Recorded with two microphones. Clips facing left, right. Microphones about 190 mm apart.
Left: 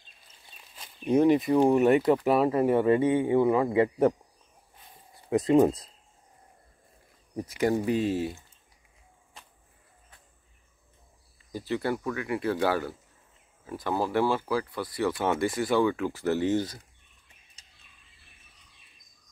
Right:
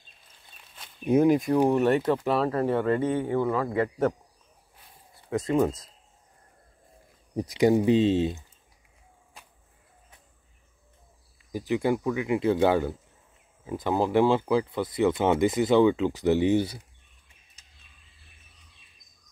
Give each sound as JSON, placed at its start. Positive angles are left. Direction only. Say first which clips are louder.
{"t": 1.0, "sound": "speech", "louder": "right 1 dB", "side_deg": -5}
{"t": 5.3, "sound": "speech", "louder": "left 4 dB", "side_deg": 20}
{"t": 7.3, "sound": "speech", "louder": "right 5 dB", "side_deg": -15}
{"t": 11.5, "sound": "speech", "louder": "right 4 dB", "side_deg": -15}